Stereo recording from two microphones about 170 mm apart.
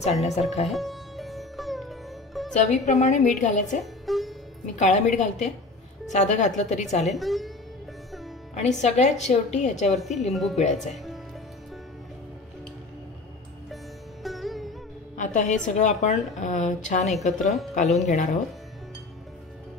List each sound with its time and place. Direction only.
0.0 s speech: 40° left (ahead or behind)
0.7 s sitar: centre (ahead or behind)
2.5 s a woman's voice: 45° left (ahead or behind)
3.8 s music: centre (ahead or behind)
4.7 s a woman's voice: 45° left (ahead or behind)
7.2 s speech: centre (ahead or behind)
8.5 s a woman's voice: 40° left (ahead or behind)
9.9 s speech: centre (ahead or behind)
10.5 s a woman's voice: 45° left (ahead or behind)
10.8 s speech: centre (ahead or behind)
14.2 s music: centre (ahead or behind)
15.1 s a woman's voice: 45° left (ahead or behind)